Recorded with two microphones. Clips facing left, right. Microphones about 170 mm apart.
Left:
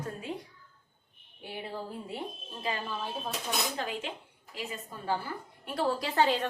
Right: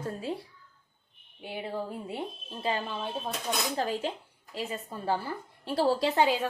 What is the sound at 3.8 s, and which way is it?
A woman's voice, 35° right (ahead or behind).